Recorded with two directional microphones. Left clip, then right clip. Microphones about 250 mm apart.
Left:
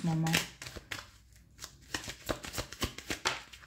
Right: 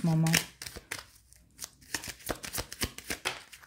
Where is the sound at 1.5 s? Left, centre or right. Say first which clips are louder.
Right 1 dB; right.